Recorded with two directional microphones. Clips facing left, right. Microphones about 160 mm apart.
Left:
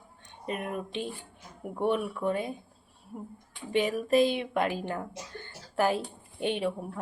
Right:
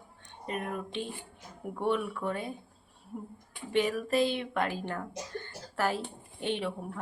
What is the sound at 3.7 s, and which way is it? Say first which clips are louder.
Speech: left 3 dB; 15° left (ahead or behind).